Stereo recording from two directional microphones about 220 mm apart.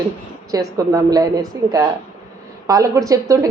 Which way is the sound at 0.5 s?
15° right (ahead or behind).